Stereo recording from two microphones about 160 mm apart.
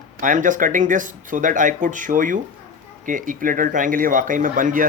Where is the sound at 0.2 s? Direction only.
55° right (ahead or behind).